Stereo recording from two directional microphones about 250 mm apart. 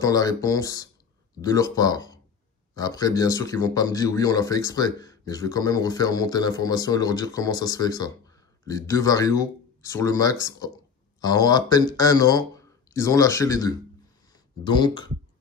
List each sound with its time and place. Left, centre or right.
0.0 s speech: centre